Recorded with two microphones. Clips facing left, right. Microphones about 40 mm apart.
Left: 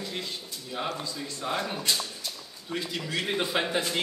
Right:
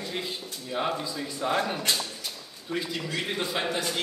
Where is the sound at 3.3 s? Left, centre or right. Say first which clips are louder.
Left 4 dB; centre.